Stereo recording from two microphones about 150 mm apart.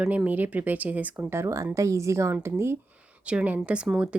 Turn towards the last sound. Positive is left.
turn(degrees=-5)  # may be behind; listen again after turning